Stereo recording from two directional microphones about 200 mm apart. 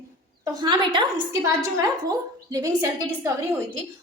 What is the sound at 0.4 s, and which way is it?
A woman's voice, 20° right (ahead or behind).